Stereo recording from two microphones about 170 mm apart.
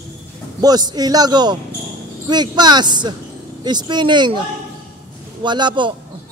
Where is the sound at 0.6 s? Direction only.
25° right (ahead or behind).